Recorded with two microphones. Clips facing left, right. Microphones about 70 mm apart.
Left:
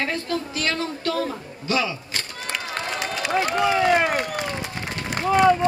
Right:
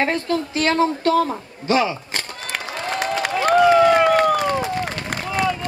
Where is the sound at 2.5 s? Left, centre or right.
Right.